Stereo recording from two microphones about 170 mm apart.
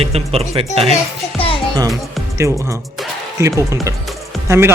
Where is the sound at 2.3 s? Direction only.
15° right (ahead or behind).